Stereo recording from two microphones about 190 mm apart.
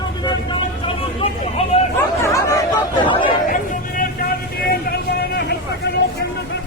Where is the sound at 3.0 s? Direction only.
25° left (ahead or behind).